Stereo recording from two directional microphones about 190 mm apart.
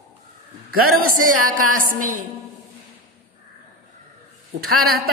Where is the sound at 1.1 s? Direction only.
45° right (ahead or behind).